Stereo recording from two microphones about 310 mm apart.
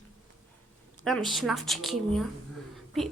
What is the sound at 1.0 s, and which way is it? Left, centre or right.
Music, centre.